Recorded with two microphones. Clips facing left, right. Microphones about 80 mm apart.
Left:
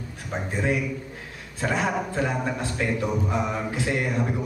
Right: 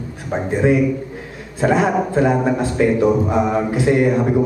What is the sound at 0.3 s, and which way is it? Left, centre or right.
A man's voice, right.